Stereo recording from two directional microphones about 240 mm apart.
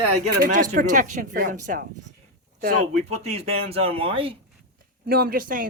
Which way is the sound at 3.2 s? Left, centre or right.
Right.